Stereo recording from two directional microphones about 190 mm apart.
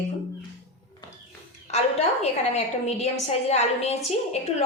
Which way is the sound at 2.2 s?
35° left (ahead or behind).